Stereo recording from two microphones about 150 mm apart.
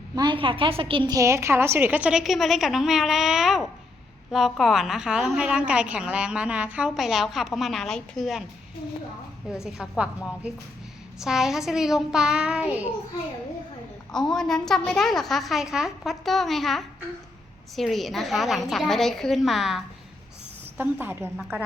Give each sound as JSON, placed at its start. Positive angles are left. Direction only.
{"t": 0.2, "sound": "a woman's voice", "side_deg": -35}
{"t": 1.1, "sound": "a woman's voice", "side_deg": -20}
{"t": 9.6, "sound": "a woman's voice", "side_deg": -5}
{"t": 14.1, "sound": "a woman's voice", "side_deg": 5}
{"t": 20.7, "sound": "a woman's voice", "side_deg": -15}